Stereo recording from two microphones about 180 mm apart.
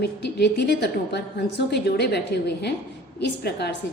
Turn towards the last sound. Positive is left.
turn(degrees=70)  # may be behind; listen again after turning